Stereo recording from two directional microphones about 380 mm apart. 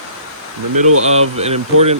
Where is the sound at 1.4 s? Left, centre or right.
Centre.